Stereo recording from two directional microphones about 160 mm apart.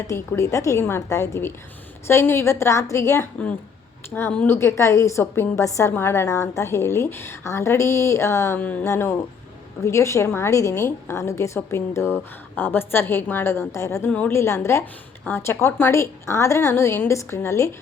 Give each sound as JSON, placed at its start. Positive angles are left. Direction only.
{"t": 0.1, "sound": "a woman's voice", "side_deg": 20}